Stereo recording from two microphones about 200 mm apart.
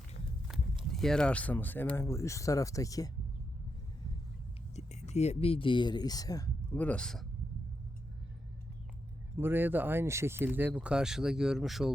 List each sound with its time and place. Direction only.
0.9 s speech: centre (ahead or behind)
4.7 s speech: 35° left (ahead or behind); by 7.3 s 5° left (ahead or behind)
9.4 s speech: 10° right (ahead or behind)